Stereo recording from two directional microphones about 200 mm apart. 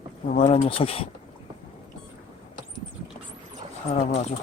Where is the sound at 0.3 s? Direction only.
30° left (ahead or behind).